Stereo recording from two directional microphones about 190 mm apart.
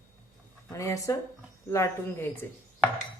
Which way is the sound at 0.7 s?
15° left (ahead or behind).